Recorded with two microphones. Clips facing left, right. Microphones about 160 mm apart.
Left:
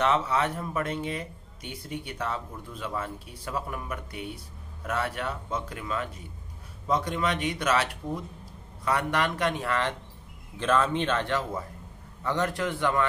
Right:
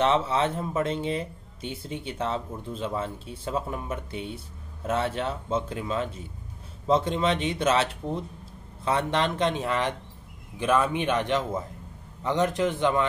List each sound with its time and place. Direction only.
0.0 s speech: 25° right (ahead or behind)